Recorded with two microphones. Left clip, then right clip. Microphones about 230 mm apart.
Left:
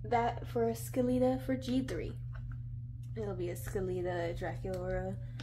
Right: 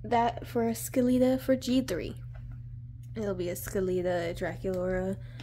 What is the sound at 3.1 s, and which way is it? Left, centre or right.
Speech, right.